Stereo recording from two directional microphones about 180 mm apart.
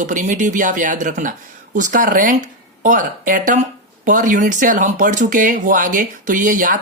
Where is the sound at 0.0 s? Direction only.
45° right (ahead or behind).